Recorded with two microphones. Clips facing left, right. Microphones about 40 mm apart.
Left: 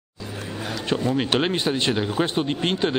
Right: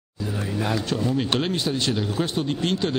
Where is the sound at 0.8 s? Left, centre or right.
Left.